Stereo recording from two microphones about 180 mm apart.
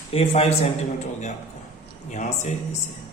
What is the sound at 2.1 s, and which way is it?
Speech, 40° left (ahead or behind).